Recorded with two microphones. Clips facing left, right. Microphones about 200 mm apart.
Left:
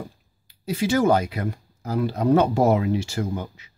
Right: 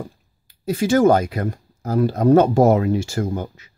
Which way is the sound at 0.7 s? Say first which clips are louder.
Right 5 dB; 50° right (ahead or behind).